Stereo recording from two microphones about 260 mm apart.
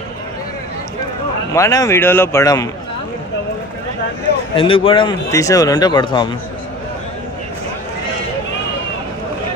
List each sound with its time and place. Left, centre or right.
1.5 s speech: centre
4.6 s speech: left